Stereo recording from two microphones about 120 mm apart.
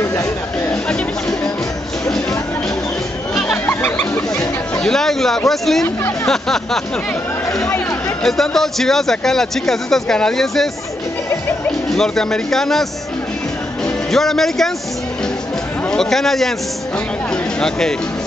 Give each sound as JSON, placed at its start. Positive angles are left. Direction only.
{"t": 3.6, "sound": "a sound", "side_deg": 20}
{"t": 4.8, "sound": "a man's voice", "side_deg": 5}
{"t": 11.9, "sound": "a man's voice", "side_deg": 5}
{"t": 14.1, "sound": "a man's voice", "side_deg": 5}
{"t": 15.9, "sound": "a man's voice", "side_deg": 5}
{"t": 17.6, "sound": "a man's voice", "side_deg": 5}